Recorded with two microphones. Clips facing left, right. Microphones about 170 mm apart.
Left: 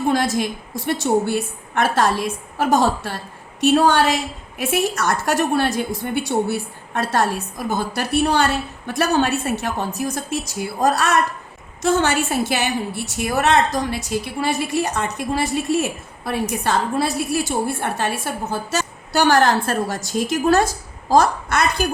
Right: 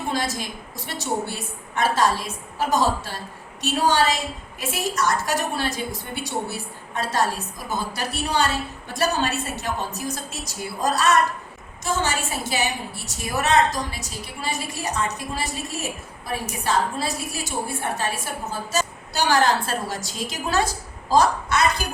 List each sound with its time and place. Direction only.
0.1 s a woman's voice: 55° left (ahead or behind)